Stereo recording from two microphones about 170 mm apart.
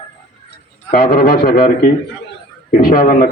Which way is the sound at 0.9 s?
55° left (ahead or behind).